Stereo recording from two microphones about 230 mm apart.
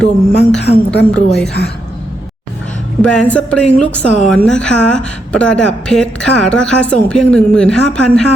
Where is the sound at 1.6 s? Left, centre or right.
Left.